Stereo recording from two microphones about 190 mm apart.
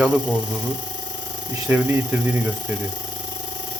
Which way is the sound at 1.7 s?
10° right (ahead or behind).